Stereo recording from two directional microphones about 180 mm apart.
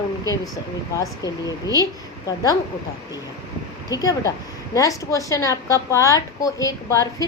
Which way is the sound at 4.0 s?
20° left (ahead or behind).